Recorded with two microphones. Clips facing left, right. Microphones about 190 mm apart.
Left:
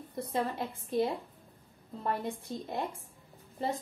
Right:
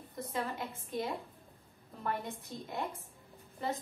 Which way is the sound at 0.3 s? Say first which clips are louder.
Left 5 dB; 30° left (ahead or behind).